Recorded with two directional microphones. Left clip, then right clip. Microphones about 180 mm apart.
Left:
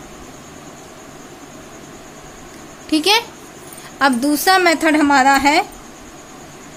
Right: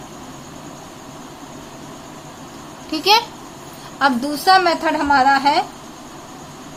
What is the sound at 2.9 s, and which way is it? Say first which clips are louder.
A woman's voice: even; 45° left (ahead or behind).